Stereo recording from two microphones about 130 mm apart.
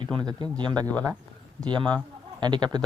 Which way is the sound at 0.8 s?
10° left (ahead or behind).